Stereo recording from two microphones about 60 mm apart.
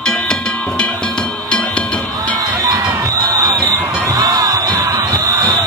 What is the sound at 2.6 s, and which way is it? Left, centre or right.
Music, right.